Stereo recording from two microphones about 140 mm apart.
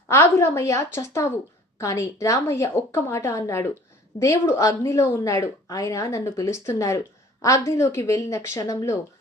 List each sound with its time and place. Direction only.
0.1 s a woman's voice: 20° left (ahead or behind)